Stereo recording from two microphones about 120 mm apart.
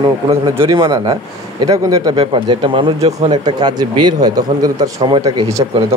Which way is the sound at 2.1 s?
45° right (ahead or behind).